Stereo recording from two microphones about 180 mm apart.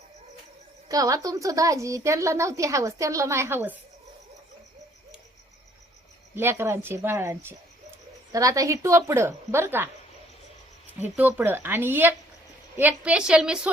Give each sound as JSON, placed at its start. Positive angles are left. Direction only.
{"t": 0.9, "sound": "a woman's voice", "side_deg": -20}
{"t": 6.3, "sound": "a woman's voice", "side_deg": -15}
{"t": 11.0, "sound": "a woman's voice", "side_deg": -10}